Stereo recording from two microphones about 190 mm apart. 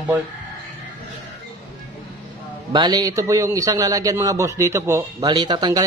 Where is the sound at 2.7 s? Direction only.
20° right (ahead or behind).